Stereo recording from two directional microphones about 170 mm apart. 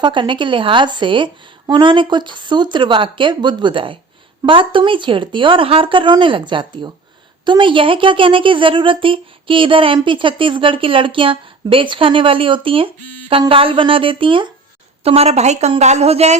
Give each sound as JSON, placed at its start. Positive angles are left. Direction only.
{"t": 0.0, "sound": "a woman's voice", "side_deg": -30}